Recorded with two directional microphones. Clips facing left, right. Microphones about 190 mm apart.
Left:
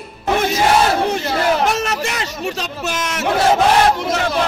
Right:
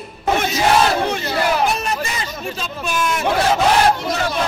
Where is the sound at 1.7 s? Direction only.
75° left (ahead or behind).